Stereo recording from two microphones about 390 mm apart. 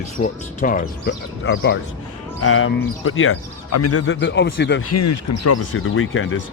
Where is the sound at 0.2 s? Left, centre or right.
Left.